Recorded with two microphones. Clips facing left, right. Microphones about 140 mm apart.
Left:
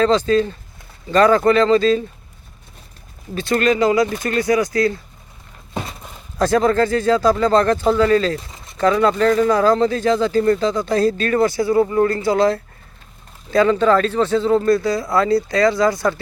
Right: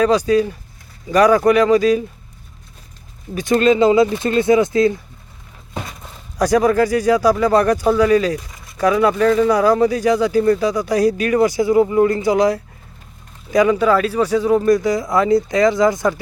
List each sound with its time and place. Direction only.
0.0 s speech: 10° right (ahead or behind)
3.3 s speech: 20° right (ahead or behind)
6.4 s speech: 10° right (ahead or behind)
8.4 s a sound: 25° left (ahead or behind)
8.8 s speech: 10° right (ahead or behind)